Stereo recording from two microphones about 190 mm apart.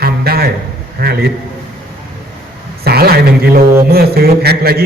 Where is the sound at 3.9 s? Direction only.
55° right (ahead or behind).